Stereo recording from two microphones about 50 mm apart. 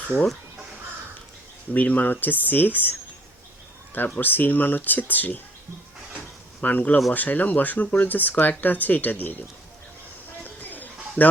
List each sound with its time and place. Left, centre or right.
1.7 s speech: left
4.2 s speech: left
6.6 s speech: left
10.4 s a sound: left
11.2 s speech: left